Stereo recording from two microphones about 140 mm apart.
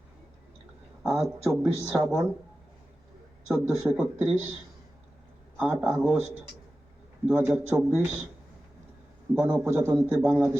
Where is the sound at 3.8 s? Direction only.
5° right (ahead or behind).